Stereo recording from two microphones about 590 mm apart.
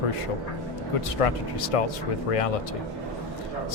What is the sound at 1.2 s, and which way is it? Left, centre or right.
Speech, left.